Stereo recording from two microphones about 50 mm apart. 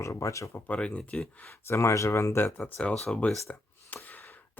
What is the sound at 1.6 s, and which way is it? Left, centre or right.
Speech, left.